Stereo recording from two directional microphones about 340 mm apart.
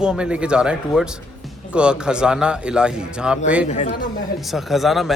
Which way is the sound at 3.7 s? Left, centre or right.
Left.